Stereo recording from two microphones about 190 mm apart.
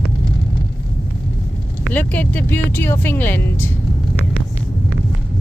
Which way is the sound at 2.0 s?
10° left (ahead or behind).